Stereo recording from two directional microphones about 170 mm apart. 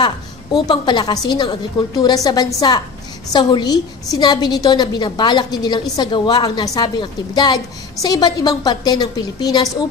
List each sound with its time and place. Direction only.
0.0 s a woman's voice: 25° left (ahead or behind)